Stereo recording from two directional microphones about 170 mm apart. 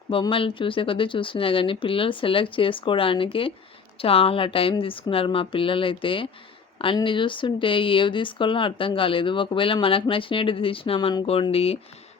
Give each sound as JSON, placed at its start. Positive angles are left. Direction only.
{"t": 0.1, "sound": "speech", "side_deg": 30}